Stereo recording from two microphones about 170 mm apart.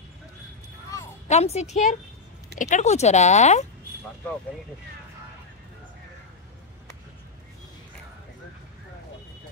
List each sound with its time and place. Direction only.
1.2 s a woman's voice: 40° left (ahead or behind)